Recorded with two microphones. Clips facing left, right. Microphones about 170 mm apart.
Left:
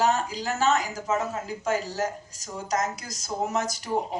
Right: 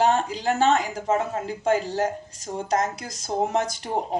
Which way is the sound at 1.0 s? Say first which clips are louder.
Right 3 dB; 30° right (ahead or behind).